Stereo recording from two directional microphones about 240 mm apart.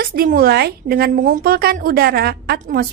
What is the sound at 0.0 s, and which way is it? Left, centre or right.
A woman's voice, right.